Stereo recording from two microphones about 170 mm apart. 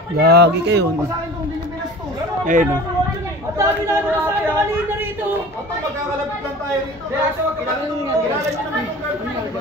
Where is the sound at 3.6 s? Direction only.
15° right (ahead or behind).